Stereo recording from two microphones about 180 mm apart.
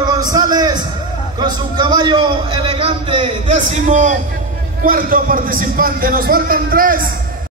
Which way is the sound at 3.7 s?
45° right (ahead or behind).